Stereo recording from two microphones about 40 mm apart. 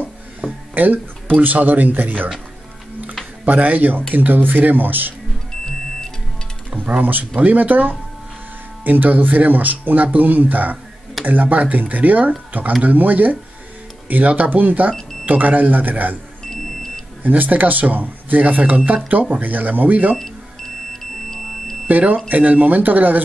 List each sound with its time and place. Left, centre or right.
0.7 s speech: right
3.4 s speech: right
7.0 s speech: right
16.4 s smoke detector: centre
17.2 s speech: right
20.2 s a sound: centre
21.8 s speech: right